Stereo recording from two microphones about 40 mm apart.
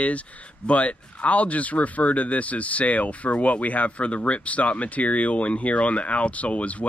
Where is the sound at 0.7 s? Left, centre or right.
Left.